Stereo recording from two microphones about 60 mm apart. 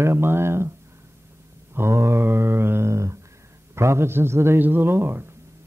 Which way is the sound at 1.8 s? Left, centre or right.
Right.